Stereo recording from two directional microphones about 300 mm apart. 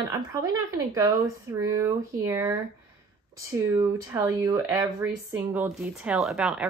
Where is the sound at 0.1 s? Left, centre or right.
Centre.